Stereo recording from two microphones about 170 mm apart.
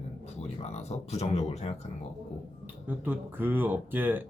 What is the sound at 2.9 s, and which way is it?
Speech, 10° right (ahead or behind).